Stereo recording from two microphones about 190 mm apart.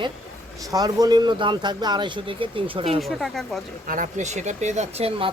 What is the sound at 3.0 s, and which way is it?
Speech, centre (ahead or behind).